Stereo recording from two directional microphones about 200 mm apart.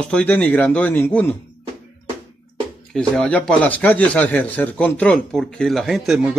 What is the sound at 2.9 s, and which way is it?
Speech, 5° left (ahead or behind).